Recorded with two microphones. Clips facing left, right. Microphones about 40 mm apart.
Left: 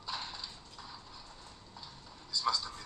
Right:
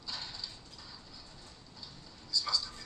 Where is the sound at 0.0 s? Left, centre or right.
Left.